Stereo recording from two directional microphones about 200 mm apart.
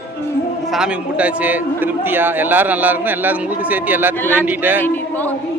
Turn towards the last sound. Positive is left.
turn(degrees=10)  # may be behind; listen again after turning